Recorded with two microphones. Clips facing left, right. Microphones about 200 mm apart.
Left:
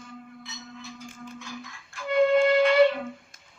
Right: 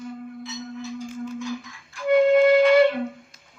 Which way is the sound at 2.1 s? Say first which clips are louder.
Right 5 dB; 50° right (ahead or behind).